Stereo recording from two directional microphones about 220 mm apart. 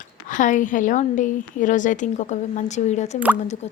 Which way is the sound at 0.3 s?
35° left (ahead or behind).